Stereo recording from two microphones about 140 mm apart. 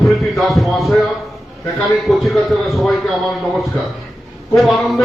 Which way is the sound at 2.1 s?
Centre (ahead or behind).